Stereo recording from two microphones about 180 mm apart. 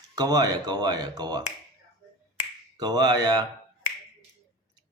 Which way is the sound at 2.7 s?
20° right (ahead or behind).